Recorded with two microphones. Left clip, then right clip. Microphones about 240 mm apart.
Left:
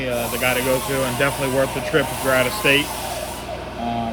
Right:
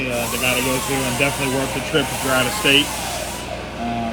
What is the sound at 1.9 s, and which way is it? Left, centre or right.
Speech, centre.